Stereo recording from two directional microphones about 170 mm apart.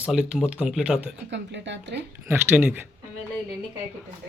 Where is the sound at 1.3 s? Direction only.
90° right.